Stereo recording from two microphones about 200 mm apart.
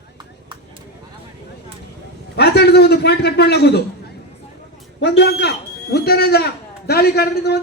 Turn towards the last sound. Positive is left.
turn(degrees=55)  # may be behind; listen again after turning